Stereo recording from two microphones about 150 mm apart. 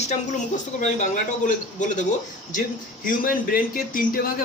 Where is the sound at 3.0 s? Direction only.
70° left (ahead or behind).